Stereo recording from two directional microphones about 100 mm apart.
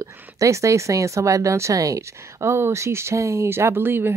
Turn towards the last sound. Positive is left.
turn(degrees=-20)  # may be behind; listen again after turning